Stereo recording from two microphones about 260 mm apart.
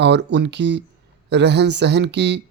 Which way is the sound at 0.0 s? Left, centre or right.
Right.